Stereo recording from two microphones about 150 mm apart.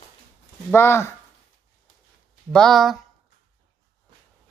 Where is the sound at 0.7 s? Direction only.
15° left (ahead or behind).